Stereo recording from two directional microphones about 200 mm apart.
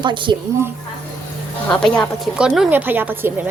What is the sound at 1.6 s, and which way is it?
A woman's voice, 5° left (ahead or behind).